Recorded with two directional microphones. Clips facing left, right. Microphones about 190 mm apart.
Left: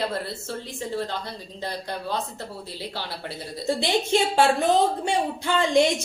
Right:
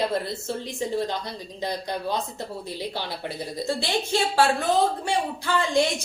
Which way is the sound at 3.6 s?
20° left (ahead or behind).